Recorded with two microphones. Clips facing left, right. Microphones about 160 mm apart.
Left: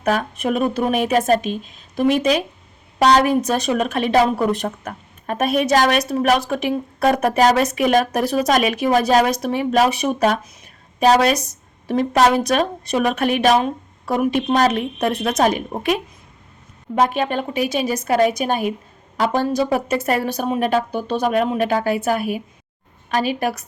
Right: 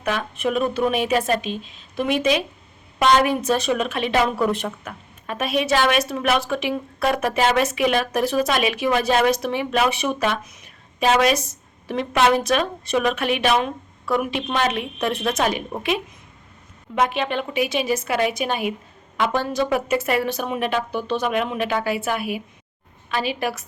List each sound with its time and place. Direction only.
0.0 s a woman's voice: 40° left (ahead or behind)
16.9 s a woman's voice: 40° left (ahead or behind)